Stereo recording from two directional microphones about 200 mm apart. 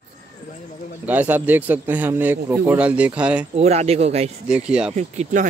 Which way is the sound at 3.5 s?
35° right (ahead or behind).